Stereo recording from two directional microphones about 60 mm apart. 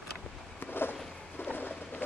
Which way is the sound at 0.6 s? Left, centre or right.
Left.